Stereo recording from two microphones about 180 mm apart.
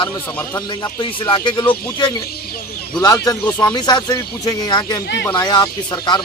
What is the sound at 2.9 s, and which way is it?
A man's voice, 20° left (ahead or behind).